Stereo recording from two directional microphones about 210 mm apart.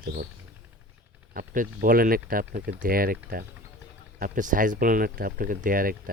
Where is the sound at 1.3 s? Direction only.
40° right (ahead or behind).